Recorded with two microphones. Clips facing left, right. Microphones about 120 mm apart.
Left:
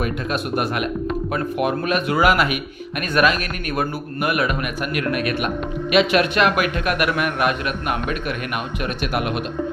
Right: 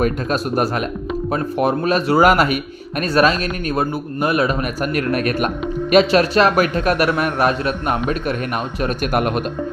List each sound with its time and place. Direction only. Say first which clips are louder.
0.0 s a man's voice: right 5 dB; 40° right (ahead or behind)